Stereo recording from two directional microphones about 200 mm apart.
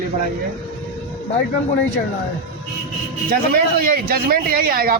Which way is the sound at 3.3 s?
45° right (ahead or behind).